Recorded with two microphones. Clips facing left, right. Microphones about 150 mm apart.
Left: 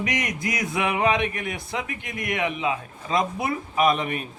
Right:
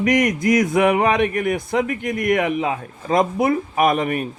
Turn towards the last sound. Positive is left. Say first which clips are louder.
# right 4 dB
turn(degrees=-50)  # may be behind; listen again after turning